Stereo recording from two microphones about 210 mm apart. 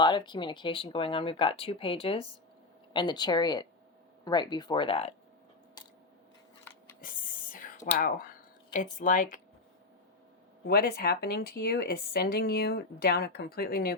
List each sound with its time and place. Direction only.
0.0 s speech: 20° left (ahead or behind)
7.0 s whispering: 40° left (ahead or behind)
7.9 s speech: 40° left (ahead or behind)
10.7 s speech: 50° left (ahead or behind)